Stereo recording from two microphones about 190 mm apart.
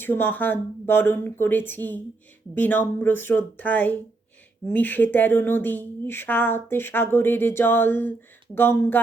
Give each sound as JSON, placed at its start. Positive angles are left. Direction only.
{"t": 0.0, "sound": "speech", "side_deg": 10}